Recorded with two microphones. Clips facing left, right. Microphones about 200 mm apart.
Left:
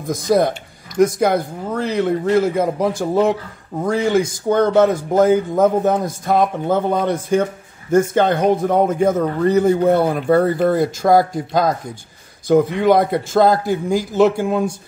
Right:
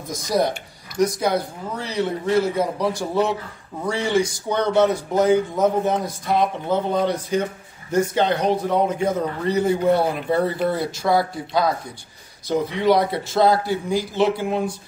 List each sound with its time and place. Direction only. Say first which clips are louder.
0.0 s a man's voice: left 5 dB; 55° left (ahead or behind)